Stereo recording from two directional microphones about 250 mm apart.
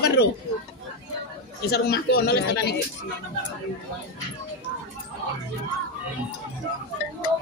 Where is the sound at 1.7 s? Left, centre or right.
Left.